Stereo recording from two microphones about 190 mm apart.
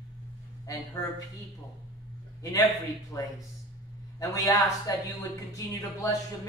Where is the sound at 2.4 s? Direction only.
20° left (ahead or behind).